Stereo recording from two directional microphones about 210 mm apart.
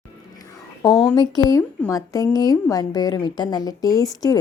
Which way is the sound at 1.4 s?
15° left (ahead or behind).